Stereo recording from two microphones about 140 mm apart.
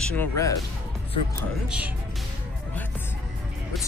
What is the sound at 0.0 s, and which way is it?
Speech, 10° left (ahead or behind).